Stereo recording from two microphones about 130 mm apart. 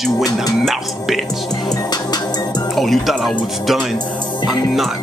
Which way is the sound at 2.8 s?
Centre (ahead or behind).